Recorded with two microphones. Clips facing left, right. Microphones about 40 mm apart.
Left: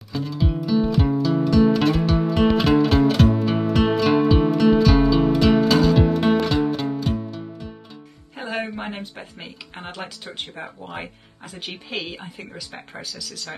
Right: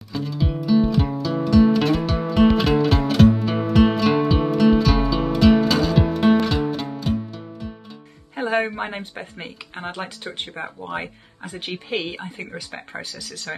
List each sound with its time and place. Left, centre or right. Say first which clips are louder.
0.1 s music: even; centre
8.4 s music: right 6 dB; centre
8.7 s a sound: right 3 dB; centre
9.4 s speech: right 4 dB; centre
10.0 s speech: right 2 dB; right
12.4 s speech: right 3 dB; right